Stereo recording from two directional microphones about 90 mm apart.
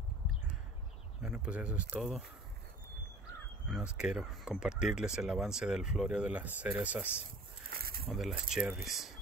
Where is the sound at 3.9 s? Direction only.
10° right (ahead or behind).